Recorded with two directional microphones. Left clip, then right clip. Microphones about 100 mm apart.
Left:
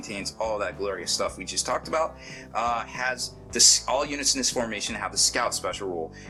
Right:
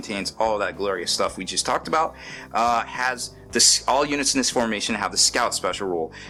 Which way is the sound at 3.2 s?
55° right (ahead or behind).